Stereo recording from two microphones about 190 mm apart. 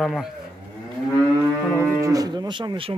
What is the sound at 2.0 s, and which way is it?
Speech, 20° right (ahead or behind).